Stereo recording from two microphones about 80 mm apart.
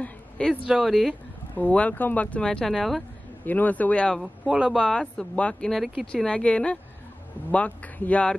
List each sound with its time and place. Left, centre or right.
0.0 s a sound: centre
0.7 s speech: centre
1.5 s speech: centre
2.4 s speech: centre
3.4 s speech: left
4.5 s speech: centre
4.8 s speech: centre
5.7 s speech: centre